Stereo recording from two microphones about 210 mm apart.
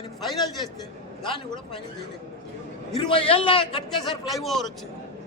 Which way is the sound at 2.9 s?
25° left (ahead or behind).